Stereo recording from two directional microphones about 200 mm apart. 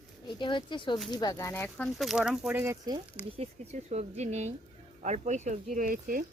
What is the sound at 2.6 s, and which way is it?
Speech, 15° right (ahead or behind).